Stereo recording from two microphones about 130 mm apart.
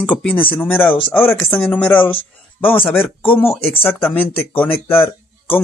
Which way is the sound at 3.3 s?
15° left (ahead or behind).